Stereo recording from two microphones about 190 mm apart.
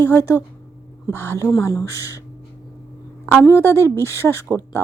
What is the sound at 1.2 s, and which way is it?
A woman's voice, 15° left (ahead or behind).